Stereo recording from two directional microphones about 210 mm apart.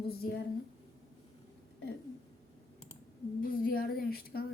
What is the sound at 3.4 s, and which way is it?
A woman's voice, 45° left (ahead or behind).